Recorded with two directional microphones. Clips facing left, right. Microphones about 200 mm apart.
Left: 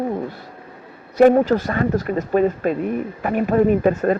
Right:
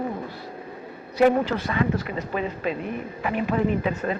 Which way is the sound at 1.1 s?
45° left (ahead or behind).